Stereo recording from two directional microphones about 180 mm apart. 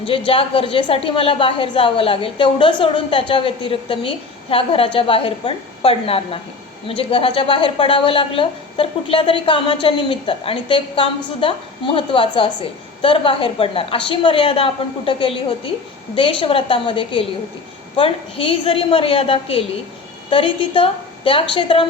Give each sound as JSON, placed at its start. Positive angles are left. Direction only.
{"t": 0.0, "sound": "a woman's voice", "side_deg": 30}